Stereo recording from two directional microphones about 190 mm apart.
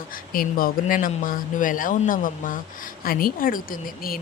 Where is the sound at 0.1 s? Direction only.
50° left (ahead or behind).